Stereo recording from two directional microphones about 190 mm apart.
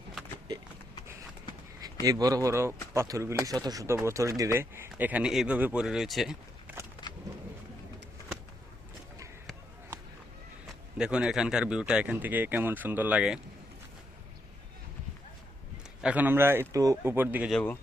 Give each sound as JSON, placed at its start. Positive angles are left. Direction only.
{"t": 2.0, "sound": "speech", "side_deg": -20}
{"t": 7.0, "sound": "a sound", "side_deg": 25}
{"t": 10.9, "sound": "speech", "side_deg": -5}
{"t": 16.0, "sound": "speech", "side_deg": -10}
{"t": 17.5, "sound": "speech", "side_deg": 5}